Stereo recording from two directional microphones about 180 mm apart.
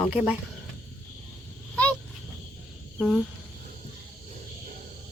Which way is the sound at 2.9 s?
Centre (ahead or behind).